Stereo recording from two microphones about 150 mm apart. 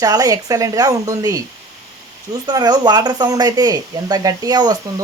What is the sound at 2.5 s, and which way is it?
Speech, 25° right (ahead or behind).